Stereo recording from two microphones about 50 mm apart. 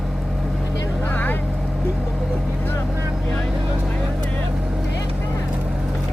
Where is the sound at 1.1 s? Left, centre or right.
Left.